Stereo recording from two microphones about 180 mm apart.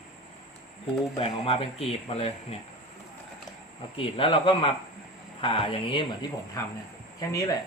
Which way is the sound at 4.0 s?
30° left (ahead or behind).